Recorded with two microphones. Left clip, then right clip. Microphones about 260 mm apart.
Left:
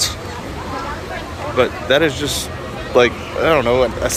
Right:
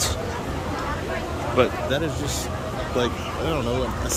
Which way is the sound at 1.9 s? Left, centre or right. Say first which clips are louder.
Left 11 dB; left.